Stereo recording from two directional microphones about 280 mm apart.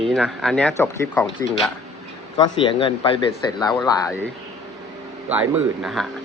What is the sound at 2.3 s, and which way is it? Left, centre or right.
Speech, centre.